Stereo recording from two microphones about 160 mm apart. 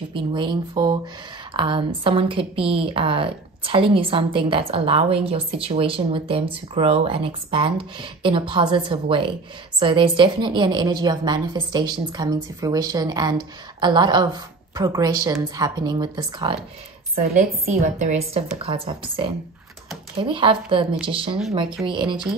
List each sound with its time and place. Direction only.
0.1 s a woman's voice: 30° right (ahead or behind)
17.2 s a woman's voice: 65° right (ahead or behind)
18.0 s a woman's voice: 40° right (ahead or behind)